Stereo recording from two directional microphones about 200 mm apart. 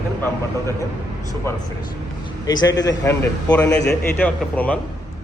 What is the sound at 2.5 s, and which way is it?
A man's voice, 20° left (ahead or behind).